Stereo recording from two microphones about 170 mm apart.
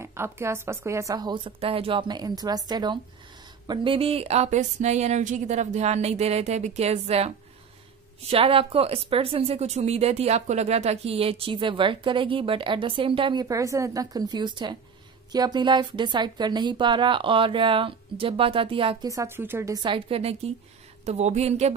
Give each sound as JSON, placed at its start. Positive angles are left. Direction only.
{"t": 0.0, "sound": "a woman's voice", "side_deg": -15}
{"t": 19.0, "sound": "a woman's voice", "side_deg": -15}